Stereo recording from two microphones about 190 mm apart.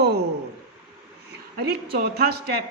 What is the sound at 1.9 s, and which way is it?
Speech, 55° right (ahead or behind).